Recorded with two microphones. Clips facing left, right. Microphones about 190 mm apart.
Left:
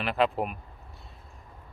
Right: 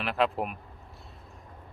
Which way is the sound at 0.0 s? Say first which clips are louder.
Left 1 dB; centre (ahead or behind).